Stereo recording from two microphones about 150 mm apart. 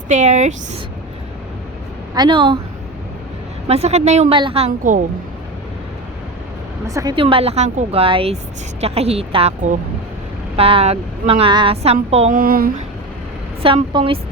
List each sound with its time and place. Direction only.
0.1 s a woman's voice: 50° right (ahead or behind)
2.1 s speech: 30° right (ahead or behind)
3.7 s a woman's voice: 45° right (ahead or behind)
4.4 s speech: 40° right (ahead or behind)
4.8 s a woman's voice: 60° right (ahead or behind)
6.8 s a woman's voice: 25° right (ahead or behind)
7.2 s a woman's voice: 40° right (ahead or behind)
10.6 s speech: 40° right (ahead or behind)
12.3 s speech: 70° right (ahead or behind)
13.6 s speech: 40° right (ahead or behind)